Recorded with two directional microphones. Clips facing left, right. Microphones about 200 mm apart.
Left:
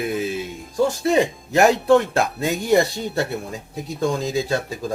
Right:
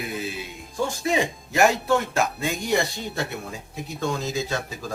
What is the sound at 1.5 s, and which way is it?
Speech, 35° left (ahead or behind).